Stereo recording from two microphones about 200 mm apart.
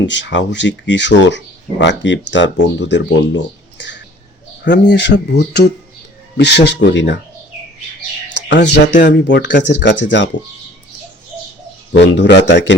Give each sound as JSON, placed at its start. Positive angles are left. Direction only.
{"t": 0.0, "sound": "speech", "side_deg": 65}
{"t": 8.4, "sound": "speech", "side_deg": 60}
{"t": 11.9, "sound": "speech", "side_deg": 60}